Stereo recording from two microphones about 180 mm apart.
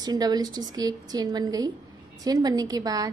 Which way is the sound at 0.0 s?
20° right (ahead or behind).